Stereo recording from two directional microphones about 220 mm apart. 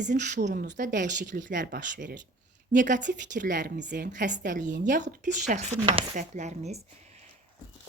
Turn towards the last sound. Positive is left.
turn(degrees=-30)  # may be behind; listen again after turning